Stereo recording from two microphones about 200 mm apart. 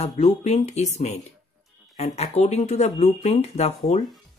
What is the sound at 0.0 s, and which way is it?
Speech, 35° left (ahead or behind).